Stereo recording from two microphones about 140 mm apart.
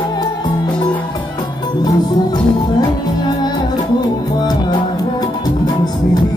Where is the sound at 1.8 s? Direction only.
30° left (ahead or behind).